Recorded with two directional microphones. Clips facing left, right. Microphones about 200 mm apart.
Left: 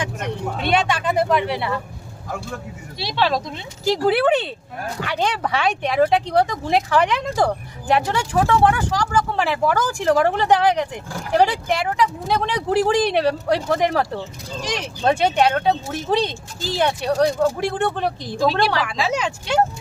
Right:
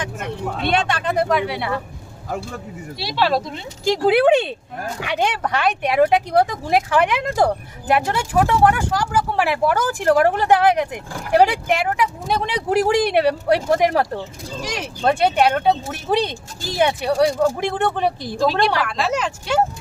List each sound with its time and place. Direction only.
0.5 s speech: 5° left (ahead or behind)
3.0 s speech: 5° right (ahead or behind)
3.8 s speech: 15° right (ahead or behind)
5.4 s speech: centre (ahead or behind)
18.3 s speech: centre (ahead or behind)